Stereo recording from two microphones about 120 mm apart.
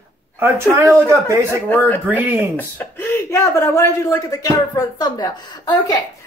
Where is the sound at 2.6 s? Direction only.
15° left (ahead or behind); by 5.9 s 35° left (ahead or behind).